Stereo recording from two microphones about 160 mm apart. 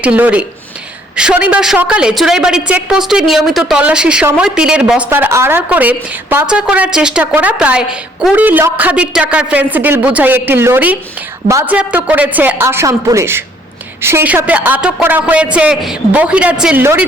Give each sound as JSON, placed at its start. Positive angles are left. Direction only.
{"t": 0.0, "sound": "a woman's voice", "side_deg": -10}